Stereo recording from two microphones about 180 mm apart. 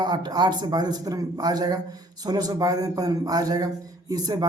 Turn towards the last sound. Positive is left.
turn(degrees=-20)  # may be behind; listen again after turning